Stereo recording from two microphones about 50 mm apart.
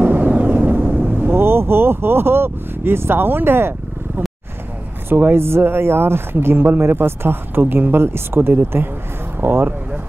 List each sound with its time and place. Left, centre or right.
0.0 s vehicle: right
5.1 s speech: right